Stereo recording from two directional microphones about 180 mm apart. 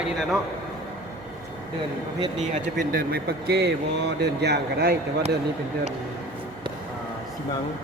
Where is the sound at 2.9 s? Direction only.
60° right (ahead or behind).